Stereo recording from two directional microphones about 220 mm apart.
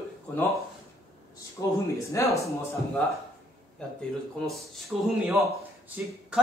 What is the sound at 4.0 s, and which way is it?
Speech, centre (ahead or behind).